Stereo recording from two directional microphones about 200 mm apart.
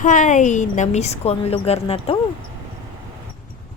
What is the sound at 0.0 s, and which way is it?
A woman's voice, 40° left (ahead or behind).